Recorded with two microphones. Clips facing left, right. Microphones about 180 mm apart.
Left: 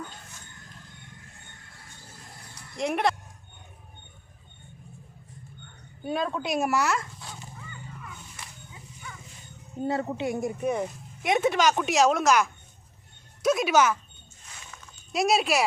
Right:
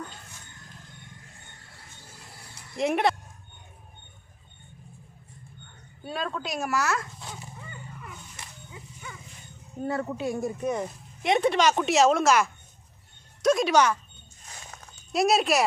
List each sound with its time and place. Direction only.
2.7 s a woman's voice: centre (ahead or behind)
6.1 s a woman's voice: 15° left (ahead or behind)
9.8 s a woman's voice: 20° left (ahead or behind); by 14.0 s 5° left (ahead or behind)
15.1 s a woman's voice: centre (ahead or behind)